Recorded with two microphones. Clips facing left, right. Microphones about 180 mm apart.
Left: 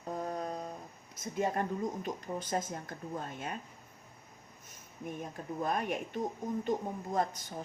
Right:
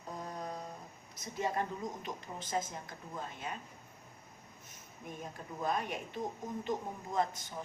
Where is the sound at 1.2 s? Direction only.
50° left (ahead or behind).